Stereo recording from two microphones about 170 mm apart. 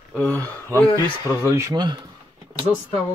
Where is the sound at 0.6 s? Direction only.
10° left (ahead or behind).